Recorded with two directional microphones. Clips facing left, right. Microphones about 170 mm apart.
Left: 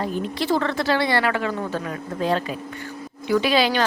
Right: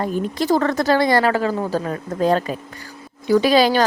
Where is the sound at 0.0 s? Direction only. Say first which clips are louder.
Right 3 dB; 45° right (ahead or behind).